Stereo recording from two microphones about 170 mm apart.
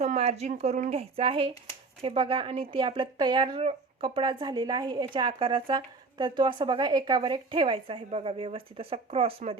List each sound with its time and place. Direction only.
0.0 s speech: 40° right (ahead or behind)